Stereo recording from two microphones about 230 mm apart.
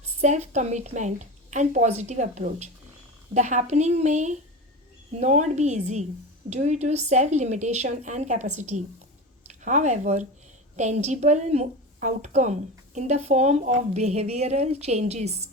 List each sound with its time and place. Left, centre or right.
0.0 s a woman's voice: right